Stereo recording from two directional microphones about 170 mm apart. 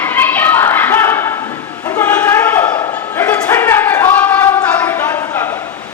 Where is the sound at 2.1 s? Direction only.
10° left (ahead or behind).